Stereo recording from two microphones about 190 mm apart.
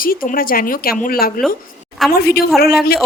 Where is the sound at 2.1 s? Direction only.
55° left (ahead or behind).